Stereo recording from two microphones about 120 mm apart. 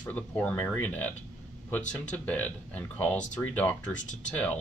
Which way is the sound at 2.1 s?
10° left (ahead or behind).